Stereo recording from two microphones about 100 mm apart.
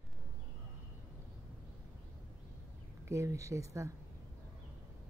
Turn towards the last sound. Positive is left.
turn(degrees=-30)  # may be behind; listen again after turning